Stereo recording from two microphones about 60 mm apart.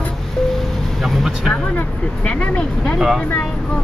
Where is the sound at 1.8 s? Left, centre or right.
Left.